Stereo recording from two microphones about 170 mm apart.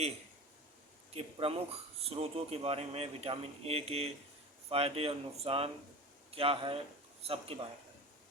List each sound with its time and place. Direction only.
1.1 s speech: 35° right (ahead or behind)